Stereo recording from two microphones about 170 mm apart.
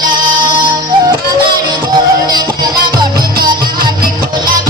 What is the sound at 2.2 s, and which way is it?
Music, 25° right (ahead or behind).